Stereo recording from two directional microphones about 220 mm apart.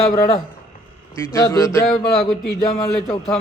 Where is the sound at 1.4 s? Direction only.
10° left (ahead or behind).